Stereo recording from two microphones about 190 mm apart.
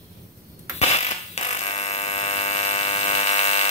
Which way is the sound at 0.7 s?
35° left (ahead or behind).